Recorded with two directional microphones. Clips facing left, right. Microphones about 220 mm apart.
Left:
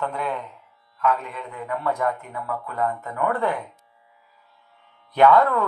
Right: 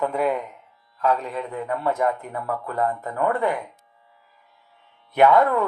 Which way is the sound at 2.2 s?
45° right (ahead or behind).